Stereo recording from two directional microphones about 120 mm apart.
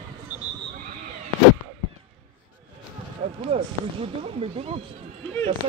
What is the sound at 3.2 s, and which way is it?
Speech, 55° right (ahead or behind).